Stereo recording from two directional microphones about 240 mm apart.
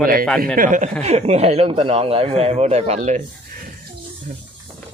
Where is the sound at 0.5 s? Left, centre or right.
Right.